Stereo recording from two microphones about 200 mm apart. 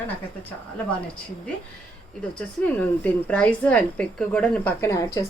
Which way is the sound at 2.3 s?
5° left (ahead or behind).